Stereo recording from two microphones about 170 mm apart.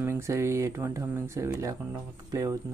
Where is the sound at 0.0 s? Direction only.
15° right (ahead or behind).